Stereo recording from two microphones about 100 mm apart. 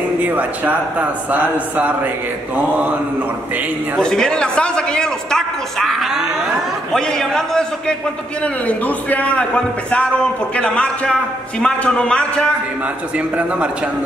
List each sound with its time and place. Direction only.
0.2 s a man's voice: 15° right (ahead or behind)
3.9 s a man's voice: 5° left (ahead or behind)
8.6 s a man's voice: 15° left (ahead or behind)